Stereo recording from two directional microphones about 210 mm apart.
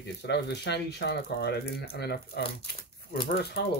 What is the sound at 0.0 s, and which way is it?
Speech, 55° left (ahead or behind).